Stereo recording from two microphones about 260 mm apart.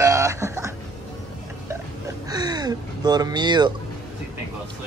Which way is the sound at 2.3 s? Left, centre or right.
Centre.